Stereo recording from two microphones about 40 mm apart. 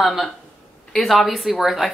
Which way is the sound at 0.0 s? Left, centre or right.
Centre.